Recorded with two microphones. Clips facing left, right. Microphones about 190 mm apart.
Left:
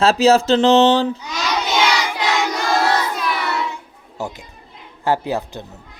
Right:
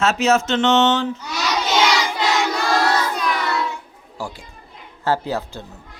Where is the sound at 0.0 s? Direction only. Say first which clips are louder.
Left 4 dB; 30° left (ahead or behind).